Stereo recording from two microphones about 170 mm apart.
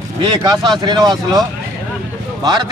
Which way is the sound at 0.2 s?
25° right (ahead or behind).